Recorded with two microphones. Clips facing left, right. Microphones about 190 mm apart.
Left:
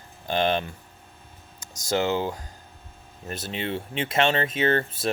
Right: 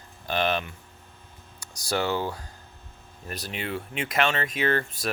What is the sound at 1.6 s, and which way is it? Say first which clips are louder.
Speech: left 3 dB; 20° left (ahead or behind).